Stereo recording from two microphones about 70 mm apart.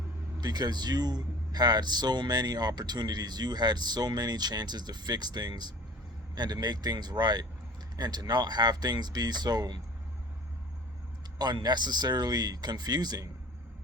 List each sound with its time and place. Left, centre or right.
0.3 s a man's voice: right
6.3 s speech: right
7.9 s speech: right
11.3 s speech: right